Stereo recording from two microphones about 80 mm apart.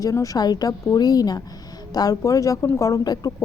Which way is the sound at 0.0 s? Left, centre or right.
Left.